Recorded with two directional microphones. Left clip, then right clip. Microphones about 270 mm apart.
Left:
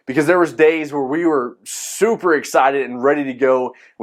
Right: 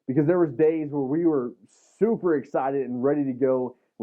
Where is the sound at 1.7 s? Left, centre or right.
Centre.